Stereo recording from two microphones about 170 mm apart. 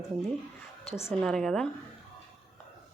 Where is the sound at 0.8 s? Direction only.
35° left (ahead or behind).